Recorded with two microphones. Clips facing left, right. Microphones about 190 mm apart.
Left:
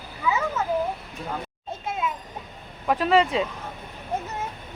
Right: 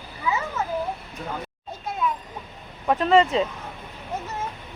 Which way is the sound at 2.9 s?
5° left (ahead or behind).